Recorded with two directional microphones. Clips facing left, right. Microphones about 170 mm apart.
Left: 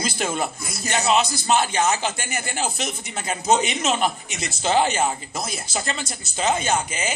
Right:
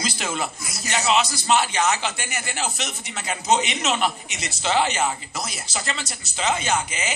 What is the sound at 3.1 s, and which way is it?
A man's voice, 35° left (ahead or behind).